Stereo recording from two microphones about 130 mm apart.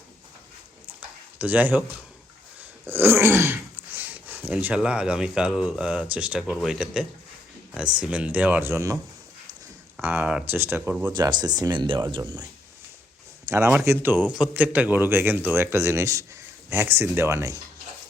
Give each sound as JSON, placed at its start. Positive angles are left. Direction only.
{"t": 1.4, "sound": "speech", "side_deg": -10}
{"t": 2.6, "sound": "a sound", "side_deg": -15}
{"t": 6.4, "sound": "speech", "side_deg": -5}
{"t": 10.0, "sound": "speech", "side_deg": -15}
{"t": 11.1, "sound": "speech", "side_deg": -35}
{"t": 13.5, "sound": "speech", "side_deg": -20}